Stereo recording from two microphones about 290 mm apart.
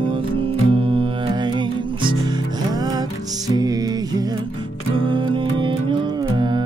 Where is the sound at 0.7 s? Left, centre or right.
Centre.